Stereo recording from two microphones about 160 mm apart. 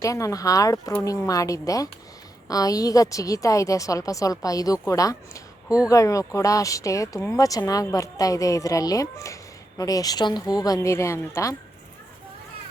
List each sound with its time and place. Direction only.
0.0 s speech: 20° left (ahead or behind)